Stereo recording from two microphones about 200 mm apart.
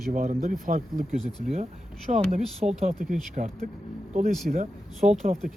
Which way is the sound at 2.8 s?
45° right (ahead or behind).